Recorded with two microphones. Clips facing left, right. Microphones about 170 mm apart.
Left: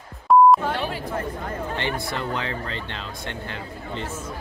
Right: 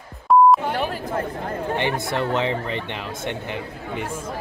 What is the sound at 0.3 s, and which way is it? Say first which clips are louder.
Beep: even; centre (ahead or behind).